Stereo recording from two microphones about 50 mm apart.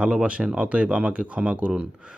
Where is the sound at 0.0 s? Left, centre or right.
Right.